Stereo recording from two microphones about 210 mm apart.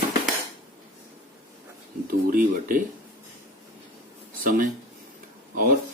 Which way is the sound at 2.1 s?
40° right (ahead or behind).